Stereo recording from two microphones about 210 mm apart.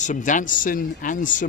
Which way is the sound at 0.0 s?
35° left (ahead or behind).